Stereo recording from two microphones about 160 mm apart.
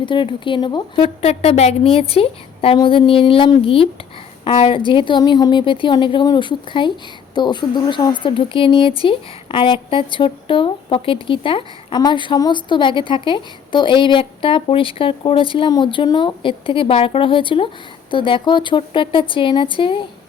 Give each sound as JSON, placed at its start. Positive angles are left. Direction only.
{"t": 0.0, "sound": "a woman's voice", "side_deg": 30}